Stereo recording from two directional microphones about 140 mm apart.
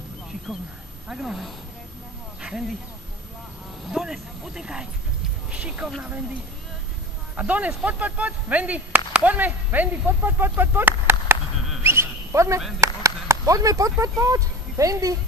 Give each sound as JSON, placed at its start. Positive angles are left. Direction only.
{"t": 1.0, "sound": "speech", "side_deg": -5}
{"t": 3.9, "sound": "speech", "side_deg": -5}
{"t": 7.3, "sound": "speech", "side_deg": -10}
{"t": 11.8, "sound": "a sound", "side_deg": -20}
{"t": 12.8, "sound": "speech", "side_deg": -20}